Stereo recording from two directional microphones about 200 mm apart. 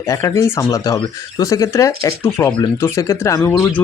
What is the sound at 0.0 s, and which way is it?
Speech, 15° left (ahead or behind).